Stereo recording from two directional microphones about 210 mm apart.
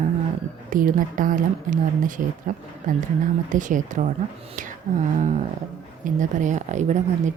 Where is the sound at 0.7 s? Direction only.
40° right (ahead or behind).